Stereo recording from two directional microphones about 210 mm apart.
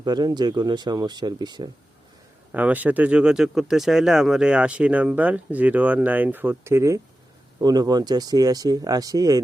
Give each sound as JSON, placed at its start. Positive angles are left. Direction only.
{"t": 0.0, "sound": "speech", "side_deg": -20}
{"t": 2.5, "sound": "speech", "side_deg": -10}